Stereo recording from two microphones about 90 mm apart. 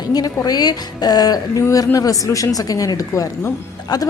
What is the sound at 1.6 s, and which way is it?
A woman's voice, 35° left (ahead or behind).